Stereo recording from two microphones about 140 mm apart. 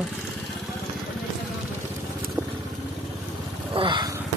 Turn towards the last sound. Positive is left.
turn(degrees=-35)  # may be behind; listen again after turning